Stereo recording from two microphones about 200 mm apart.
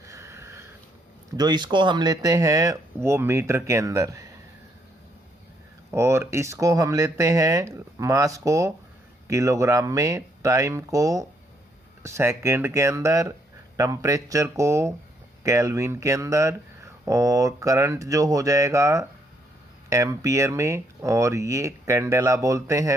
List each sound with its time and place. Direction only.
0.0 s sniff: 15° right (ahead or behind)
1.4 s speech: 20° right (ahead or behind)
5.9 s speech: 15° right (ahead or behind)